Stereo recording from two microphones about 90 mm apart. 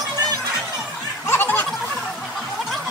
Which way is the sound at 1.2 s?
25° left (ahead or behind).